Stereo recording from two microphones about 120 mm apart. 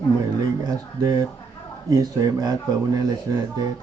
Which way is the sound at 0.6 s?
30° right (ahead or behind).